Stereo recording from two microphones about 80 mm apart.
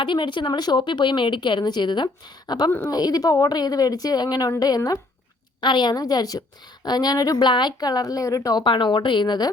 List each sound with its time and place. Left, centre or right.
0.0 s a woman's voice: left
5.5 s a woman's voice: left
8.6 s a woman's voice: left